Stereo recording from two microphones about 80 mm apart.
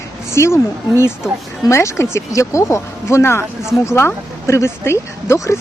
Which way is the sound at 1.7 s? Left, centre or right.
Left.